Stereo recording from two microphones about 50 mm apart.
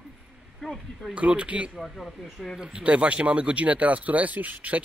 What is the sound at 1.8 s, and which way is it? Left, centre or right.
Speech, centre.